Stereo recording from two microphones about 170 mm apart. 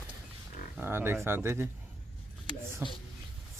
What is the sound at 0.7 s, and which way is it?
Speech, 15° right (ahead or behind).